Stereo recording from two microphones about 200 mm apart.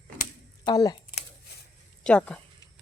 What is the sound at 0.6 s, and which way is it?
Speech, 20° left (ahead or behind).